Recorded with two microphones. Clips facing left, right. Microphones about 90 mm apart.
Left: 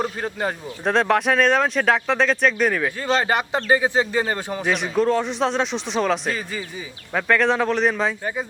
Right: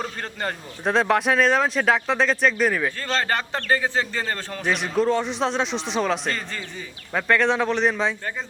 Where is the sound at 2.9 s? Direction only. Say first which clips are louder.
Left 4 dB; 15° left (ahead or behind).